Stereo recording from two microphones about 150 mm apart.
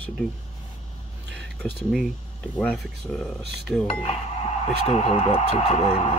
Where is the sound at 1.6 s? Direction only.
Centre (ahead or behind).